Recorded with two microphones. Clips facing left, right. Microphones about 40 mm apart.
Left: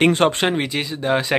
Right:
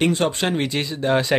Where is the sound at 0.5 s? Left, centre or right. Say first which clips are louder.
Even; centre.